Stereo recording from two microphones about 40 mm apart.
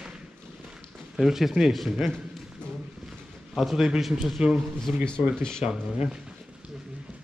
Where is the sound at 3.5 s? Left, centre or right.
Centre.